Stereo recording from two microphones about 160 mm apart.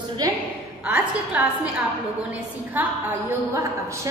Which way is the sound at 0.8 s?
10° right (ahead or behind).